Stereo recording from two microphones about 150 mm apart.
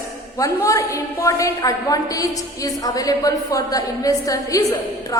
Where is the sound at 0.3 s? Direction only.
20° left (ahead or behind).